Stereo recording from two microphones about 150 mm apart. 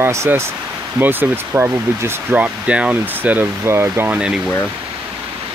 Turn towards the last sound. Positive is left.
turn(degrees=-5)  # may be behind; listen again after turning